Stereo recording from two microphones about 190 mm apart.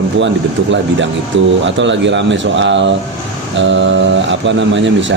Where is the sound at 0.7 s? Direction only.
75° right (ahead or behind).